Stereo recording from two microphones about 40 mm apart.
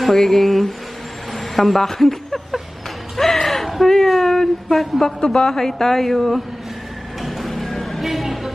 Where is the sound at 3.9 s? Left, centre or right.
Centre.